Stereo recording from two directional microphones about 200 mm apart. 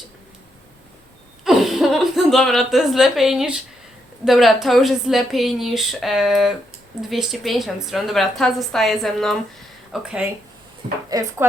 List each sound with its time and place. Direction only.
1.5 s a sound: centre (ahead or behind)
4.3 s a woman's voice: centre (ahead or behind)
11.1 s speech: 20° right (ahead or behind)